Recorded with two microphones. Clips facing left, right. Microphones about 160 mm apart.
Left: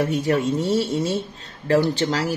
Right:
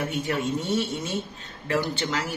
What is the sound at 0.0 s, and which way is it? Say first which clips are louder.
Speech: left 7 dB; 35° left (ahead or behind).